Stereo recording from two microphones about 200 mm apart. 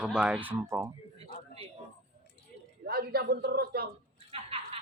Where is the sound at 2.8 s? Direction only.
50° right (ahead or behind).